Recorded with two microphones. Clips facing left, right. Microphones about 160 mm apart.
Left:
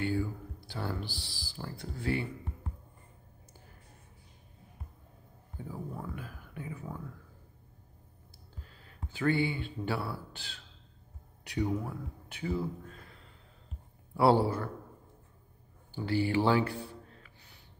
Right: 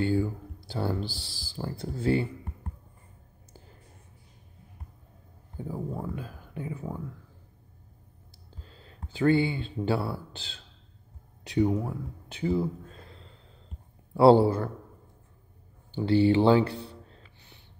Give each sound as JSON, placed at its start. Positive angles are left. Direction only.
{"t": 0.0, "sound": "speech", "side_deg": -30}
{"t": 5.7, "sound": "speech", "side_deg": -20}
{"t": 8.6, "sound": "speech", "side_deg": -30}
{"t": 15.9, "sound": "a sound", "side_deg": -25}